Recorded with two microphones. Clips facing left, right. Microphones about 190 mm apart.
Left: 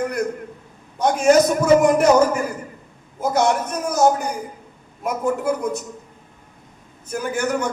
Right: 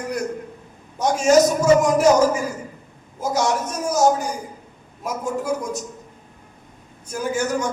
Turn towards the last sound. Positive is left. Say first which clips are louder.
# even
turn(degrees=60)  # may be behind; listen again after turning